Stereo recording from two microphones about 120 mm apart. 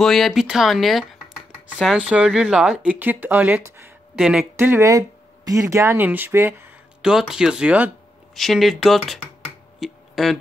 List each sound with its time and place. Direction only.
0.0 s speech: centre (ahead or behind); by 3.9 s 20° right (ahead or behind)
4.2 s speech: 5° right (ahead or behind)
4.6 s speech: 20° right (ahead or behind)
7.0 s speech: 5° right (ahead or behind)
8.4 s speech: centre (ahead or behind)
9.8 s a sound: centre (ahead or behind)